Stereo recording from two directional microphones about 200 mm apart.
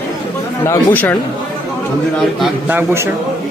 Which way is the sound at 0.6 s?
10° left (ahead or behind).